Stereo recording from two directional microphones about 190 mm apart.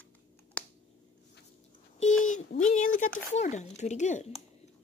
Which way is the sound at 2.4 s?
40° left (ahead or behind).